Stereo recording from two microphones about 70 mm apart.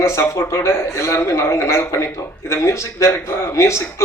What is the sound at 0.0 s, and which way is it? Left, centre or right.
Speech, left.